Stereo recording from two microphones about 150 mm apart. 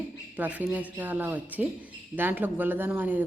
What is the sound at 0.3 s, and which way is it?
A woman's voice, 10° right (ahead or behind).